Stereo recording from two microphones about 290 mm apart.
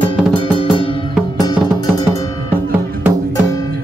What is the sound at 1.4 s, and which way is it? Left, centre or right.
Music, centre.